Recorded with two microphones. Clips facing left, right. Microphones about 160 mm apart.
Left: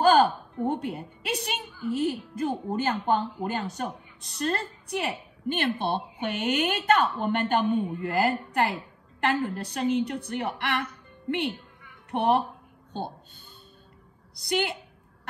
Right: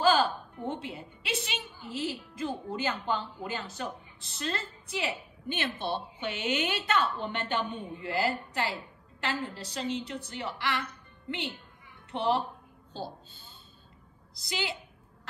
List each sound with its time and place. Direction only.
0.0 s a woman's voice: 50° left (ahead or behind)
14.5 s a woman's voice: 60° left (ahead or behind)